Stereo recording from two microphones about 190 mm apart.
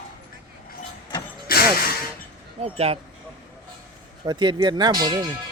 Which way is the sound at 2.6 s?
30° right (ahead or behind).